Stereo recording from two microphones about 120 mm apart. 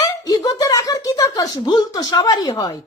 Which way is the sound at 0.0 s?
30° left (ahead or behind).